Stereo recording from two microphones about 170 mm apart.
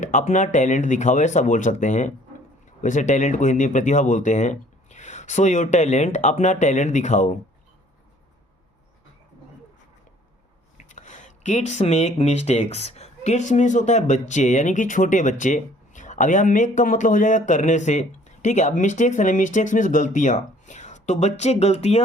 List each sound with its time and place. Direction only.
0.0 s speech: 45° left (ahead or behind)
10.8 s speech: 45° left (ahead or behind)